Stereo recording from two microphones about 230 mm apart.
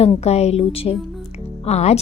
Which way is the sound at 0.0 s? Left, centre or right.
Left.